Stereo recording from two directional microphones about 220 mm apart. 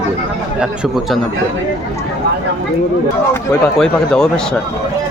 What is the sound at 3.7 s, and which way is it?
Speech, 5° left (ahead or behind).